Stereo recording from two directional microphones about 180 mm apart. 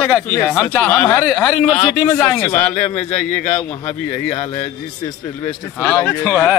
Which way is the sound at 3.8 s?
35° left (ahead or behind).